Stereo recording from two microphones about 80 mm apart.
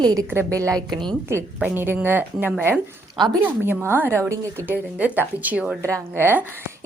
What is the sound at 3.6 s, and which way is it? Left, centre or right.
A woman's voice, right.